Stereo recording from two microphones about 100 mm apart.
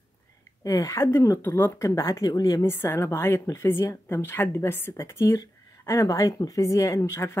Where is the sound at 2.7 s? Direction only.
25° left (ahead or behind).